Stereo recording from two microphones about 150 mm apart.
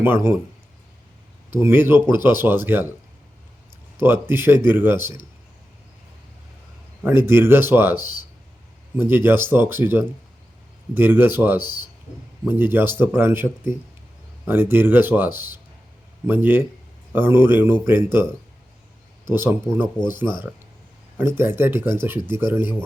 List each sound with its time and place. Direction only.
0.0 s speech: 15° right (ahead or behind)
1.5 s speech: 15° right (ahead or behind)
4.0 s speech: 15° right (ahead or behind)
7.0 s speech: 15° right (ahead or behind)
9.0 s speech: 15° right (ahead or behind)
19.3 s speech: 15° right (ahead or behind)